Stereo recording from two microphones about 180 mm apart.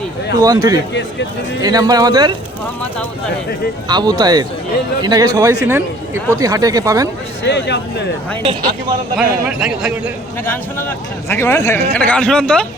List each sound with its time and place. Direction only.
0.3 s speech: 20° right (ahead or behind)
3.8 s speech: 25° right (ahead or behind)
7.4 s a man's voice: 70° left (ahead or behind)
9.1 s a man's voice: 5° right (ahead or behind)
10.4 s a man's voice: 10° left (ahead or behind)